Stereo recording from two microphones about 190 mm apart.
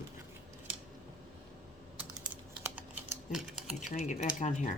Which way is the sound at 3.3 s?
Centre (ahead or behind).